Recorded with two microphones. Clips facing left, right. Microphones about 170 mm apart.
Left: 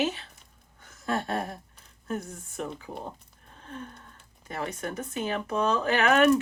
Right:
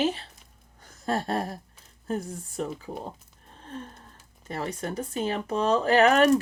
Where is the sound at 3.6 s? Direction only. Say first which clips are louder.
Right 1 dB; 35° right (ahead or behind).